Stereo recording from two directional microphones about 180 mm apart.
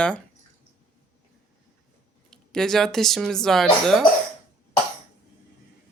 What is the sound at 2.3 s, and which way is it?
Speech, 5° left (ahead or behind).